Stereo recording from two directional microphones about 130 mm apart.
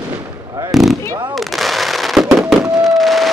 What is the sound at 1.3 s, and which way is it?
Fireworks, centre (ahead or behind).